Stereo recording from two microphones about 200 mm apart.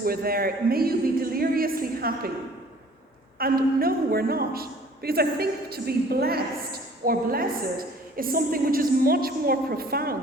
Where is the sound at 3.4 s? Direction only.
45° right (ahead or behind).